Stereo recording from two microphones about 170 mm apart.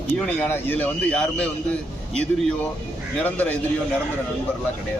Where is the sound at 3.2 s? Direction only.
10° left (ahead or behind).